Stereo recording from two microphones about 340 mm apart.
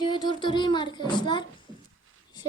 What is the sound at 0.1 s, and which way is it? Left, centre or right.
Speech, centre.